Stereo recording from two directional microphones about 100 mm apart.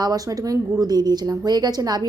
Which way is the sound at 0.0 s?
40° right (ahead or behind).